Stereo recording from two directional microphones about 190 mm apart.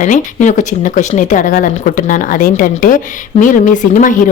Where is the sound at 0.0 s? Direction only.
40° left (ahead or behind).